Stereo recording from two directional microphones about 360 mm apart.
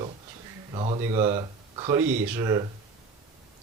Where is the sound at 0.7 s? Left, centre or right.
Centre.